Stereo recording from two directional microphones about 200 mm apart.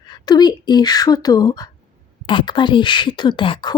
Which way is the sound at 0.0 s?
20° left (ahead or behind).